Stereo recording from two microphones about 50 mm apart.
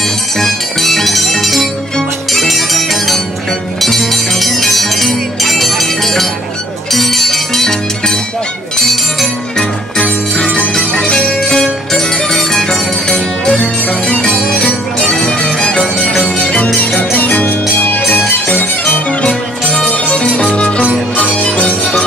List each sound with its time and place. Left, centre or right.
0.4 s music: centre; by 18.2 s left
19.2 s music: left